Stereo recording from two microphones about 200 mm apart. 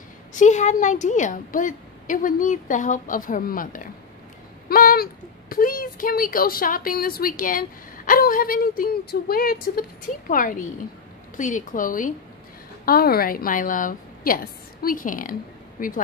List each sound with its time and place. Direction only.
0.3 s a woman's voice: 40° left (ahead or behind)